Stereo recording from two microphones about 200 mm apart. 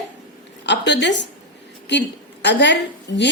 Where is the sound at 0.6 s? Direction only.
60° left (ahead or behind).